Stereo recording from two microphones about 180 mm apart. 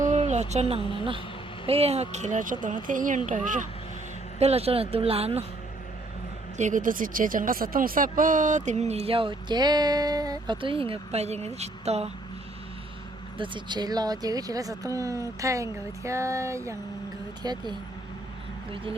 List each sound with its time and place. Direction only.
0.1 s a sound: 40° right (ahead or behind)
0.8 s a woman's voice: 25° left (ahead or behind)
1.6 s speech: 35° right (ahead or behind)
6.6 s speech: 45° right (ahead or behind)
13.4 s speech: 25° right (ahead or behind)